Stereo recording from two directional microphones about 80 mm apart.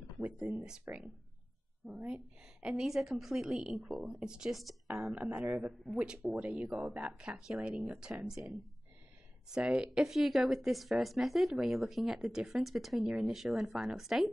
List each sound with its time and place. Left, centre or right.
0.9 s speech: right
1.9 s a woman's voice: centre
8.2 s a woman's voice: centre